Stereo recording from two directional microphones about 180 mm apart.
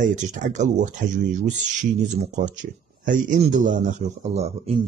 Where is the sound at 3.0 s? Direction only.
45° right (ahead or behind).